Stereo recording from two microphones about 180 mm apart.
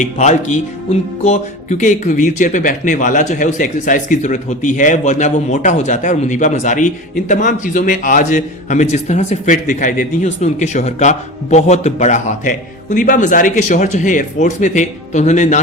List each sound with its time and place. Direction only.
0.0 s speech: 40° left (ahead or behind)